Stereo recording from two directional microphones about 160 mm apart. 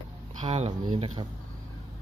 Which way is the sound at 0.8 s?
30° right (ahead or behind).